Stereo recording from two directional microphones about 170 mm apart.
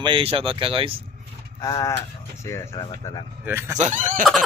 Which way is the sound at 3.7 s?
45° right (ahead or behind).